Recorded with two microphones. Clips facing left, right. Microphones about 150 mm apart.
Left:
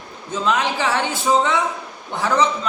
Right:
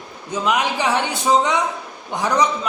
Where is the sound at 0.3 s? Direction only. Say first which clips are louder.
Even; 15° right (ahead or behind).